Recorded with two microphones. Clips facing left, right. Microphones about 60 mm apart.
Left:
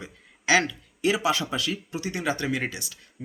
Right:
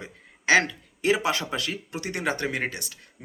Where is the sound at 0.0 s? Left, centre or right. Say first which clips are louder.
Right 2 dB; right.